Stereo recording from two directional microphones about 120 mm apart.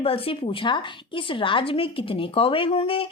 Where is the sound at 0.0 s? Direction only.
50° left (ahead or behind).